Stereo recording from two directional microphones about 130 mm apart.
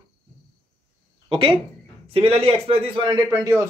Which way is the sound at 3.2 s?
25° right (ahead or behind).